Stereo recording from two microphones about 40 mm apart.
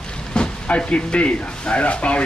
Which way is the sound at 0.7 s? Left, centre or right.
Left.